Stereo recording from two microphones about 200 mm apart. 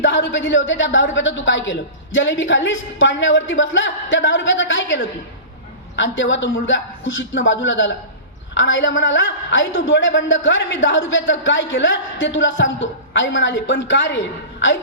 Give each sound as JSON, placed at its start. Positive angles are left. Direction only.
{"t": 0.0, "sound": "a man's voice", "side_deg": 65}